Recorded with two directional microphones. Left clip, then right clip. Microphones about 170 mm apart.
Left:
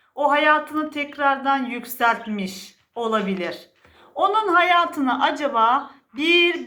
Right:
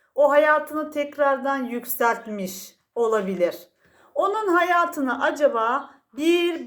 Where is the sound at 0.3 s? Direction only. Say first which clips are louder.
Left 3 dB; 55° right (ahead or behind).